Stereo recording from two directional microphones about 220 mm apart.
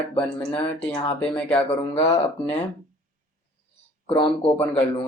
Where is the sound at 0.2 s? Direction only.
5° left (ahead or behind).